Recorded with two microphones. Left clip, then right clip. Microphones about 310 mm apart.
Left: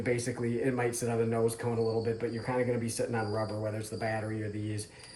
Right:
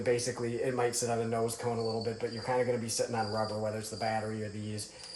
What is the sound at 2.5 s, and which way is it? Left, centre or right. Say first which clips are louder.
Speech: right 2 dB; centre.